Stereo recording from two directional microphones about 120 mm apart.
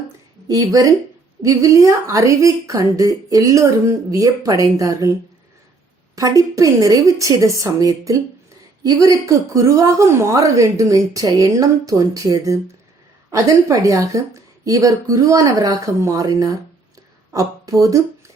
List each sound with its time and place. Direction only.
0.4 s a woman's voice: 30° right (ahead or behind)
6.1 s a woman's voice: 30° right (ahead or behind)